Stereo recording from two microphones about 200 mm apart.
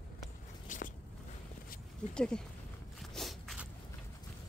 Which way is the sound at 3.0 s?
Centre (ahead or behind).